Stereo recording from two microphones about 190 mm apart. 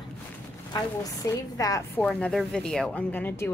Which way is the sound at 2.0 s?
5° left (ahead or behind).